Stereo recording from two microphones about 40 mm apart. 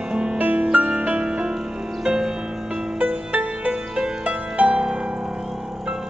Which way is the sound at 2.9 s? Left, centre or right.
Right.